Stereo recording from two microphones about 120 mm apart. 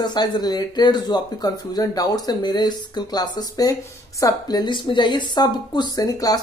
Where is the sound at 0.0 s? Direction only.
35° left (ahead or behind).